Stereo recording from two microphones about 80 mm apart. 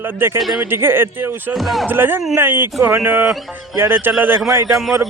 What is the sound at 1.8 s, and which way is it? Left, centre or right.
Speech, right.